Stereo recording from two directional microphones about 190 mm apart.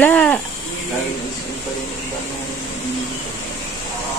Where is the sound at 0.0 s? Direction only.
10° left (ahead or behind).